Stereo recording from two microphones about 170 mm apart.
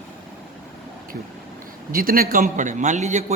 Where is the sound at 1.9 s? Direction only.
60° right (ahead or behind); by 3.3 s 40° right (ahead or behind).